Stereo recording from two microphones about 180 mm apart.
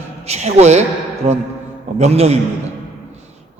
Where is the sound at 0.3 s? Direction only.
40° right (ahead or behind).